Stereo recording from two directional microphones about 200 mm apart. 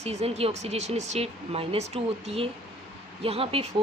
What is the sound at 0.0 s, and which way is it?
Speech, 30° right (ahead or behind).